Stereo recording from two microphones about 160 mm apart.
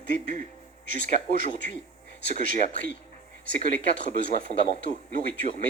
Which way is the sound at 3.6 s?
60° right (ahead or behind).